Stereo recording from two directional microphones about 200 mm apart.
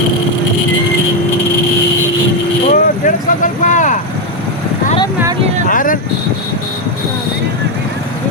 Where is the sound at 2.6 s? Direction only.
40° left (ahead or behind).